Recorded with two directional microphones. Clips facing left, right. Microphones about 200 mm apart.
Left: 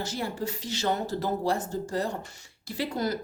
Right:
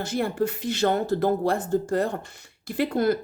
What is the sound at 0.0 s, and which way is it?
A woman's voice, 55° right (ahead or behind).